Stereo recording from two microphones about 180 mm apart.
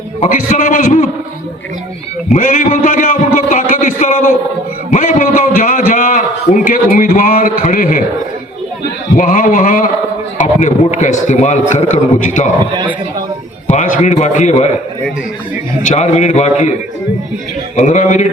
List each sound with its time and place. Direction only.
0.3 s a man's voice: 45° left (ahead or behind)
2.3 s a man's voice: 45° left (ahead or behind)
9.1 s a man's voice: 50° left (ahead or behind)
13.7 s a man's voice: 45° left (ahead or behind)
15.9 s a man's voice: 40° left (ahead or behind)
17.7 s a man's voice: 40° left (ahead or behind)